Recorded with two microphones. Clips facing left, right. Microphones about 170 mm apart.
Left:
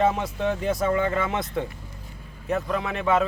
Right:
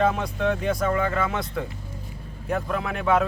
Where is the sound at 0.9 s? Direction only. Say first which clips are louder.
Left 1 dB; 25° left (ahead or behind).